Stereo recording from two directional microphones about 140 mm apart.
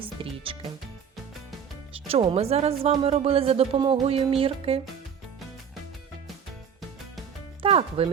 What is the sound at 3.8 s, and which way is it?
Speech, 30° right (ahead or behind).